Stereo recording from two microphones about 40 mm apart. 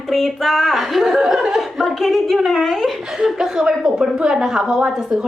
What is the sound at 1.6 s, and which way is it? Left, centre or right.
A woman's voice, centre.